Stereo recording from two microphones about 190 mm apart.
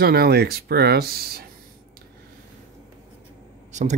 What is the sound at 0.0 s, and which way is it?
Speech, 55° right (ahead or behind).